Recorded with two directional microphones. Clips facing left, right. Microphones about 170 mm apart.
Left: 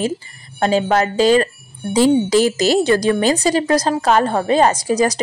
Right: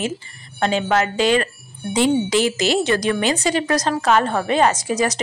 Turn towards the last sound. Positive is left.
turn(degrees=35)  # may be behind; listen again after turning